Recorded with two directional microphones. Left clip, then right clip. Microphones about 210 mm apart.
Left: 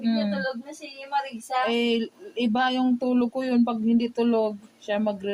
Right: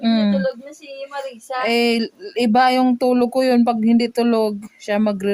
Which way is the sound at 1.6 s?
60° right (ahead or behind).